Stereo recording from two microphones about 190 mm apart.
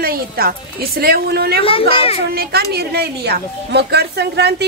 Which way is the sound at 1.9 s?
30° left (ahead or behind).